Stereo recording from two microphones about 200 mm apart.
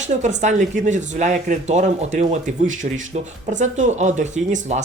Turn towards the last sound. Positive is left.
turn(degrees=-35)  # may be behind; listen again after turning